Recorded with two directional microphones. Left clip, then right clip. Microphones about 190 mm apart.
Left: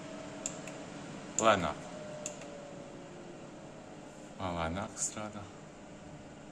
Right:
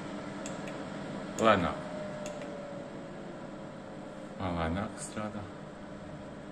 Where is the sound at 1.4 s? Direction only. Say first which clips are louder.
Right 2 dB; 10° left (ahead or behind).